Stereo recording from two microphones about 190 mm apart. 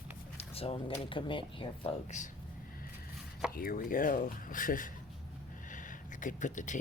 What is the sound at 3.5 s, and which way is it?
Speech, 50° left (ahead or behind).